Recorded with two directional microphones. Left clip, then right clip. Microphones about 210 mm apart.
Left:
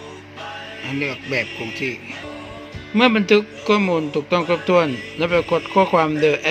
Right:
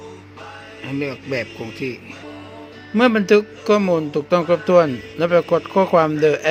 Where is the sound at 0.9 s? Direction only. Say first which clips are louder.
Even; 15° right (ahead or behind).